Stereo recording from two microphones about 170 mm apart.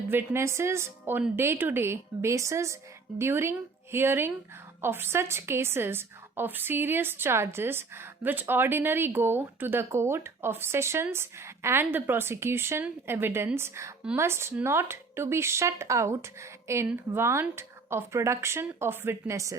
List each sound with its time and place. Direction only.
0.1 s a woman's voice: 15° right (ahead or behind)